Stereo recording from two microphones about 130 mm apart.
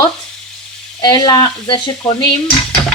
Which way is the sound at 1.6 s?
40° left (ahead or behind).